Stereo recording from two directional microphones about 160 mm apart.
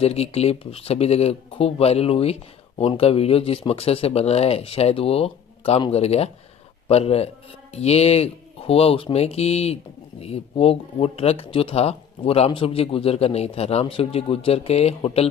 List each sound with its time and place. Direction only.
0.0 s speech: 40° left (ahead or behind)